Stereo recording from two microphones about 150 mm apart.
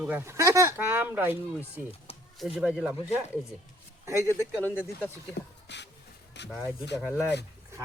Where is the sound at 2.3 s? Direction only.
5° right (ahead or behind).